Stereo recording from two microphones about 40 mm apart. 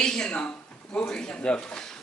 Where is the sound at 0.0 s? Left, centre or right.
Centre.